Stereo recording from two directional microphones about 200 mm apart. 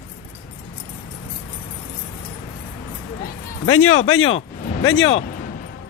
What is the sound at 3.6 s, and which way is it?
Speech, 90° left.